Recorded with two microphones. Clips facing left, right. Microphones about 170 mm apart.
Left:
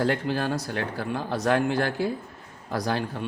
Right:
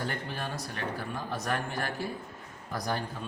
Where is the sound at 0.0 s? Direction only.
90° left.